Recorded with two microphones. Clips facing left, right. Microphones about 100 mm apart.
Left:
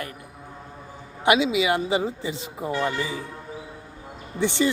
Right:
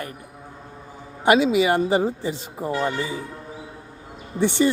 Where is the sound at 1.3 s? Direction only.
40° right (ahead or behind).